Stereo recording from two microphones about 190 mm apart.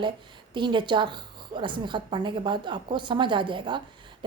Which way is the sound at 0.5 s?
25° right (ahead or behind).